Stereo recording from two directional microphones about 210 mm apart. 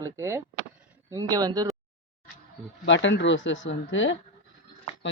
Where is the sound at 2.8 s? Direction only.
60° left (ahead or behind).